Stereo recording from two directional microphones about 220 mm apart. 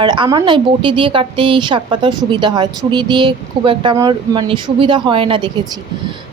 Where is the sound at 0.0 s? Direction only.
20° right (ahead or behind).